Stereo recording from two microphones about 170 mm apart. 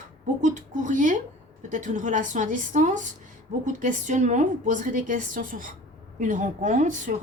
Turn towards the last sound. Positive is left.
turn(degrees=-45)  # may be behind; listen again after turning